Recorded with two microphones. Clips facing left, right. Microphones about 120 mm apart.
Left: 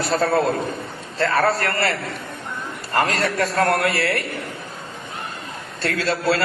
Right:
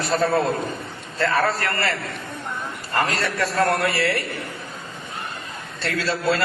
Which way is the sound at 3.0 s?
40° left (ahead or behind).